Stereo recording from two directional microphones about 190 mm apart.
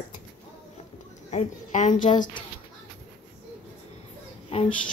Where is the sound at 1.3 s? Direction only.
40° left (ahead or behind).